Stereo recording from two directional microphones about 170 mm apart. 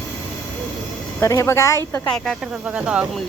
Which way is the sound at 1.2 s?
15° left (ahead or behind).